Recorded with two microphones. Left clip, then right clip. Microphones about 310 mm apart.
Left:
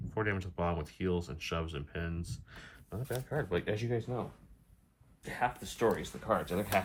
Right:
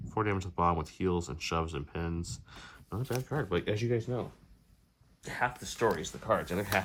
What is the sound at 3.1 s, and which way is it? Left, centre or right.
Speech, right.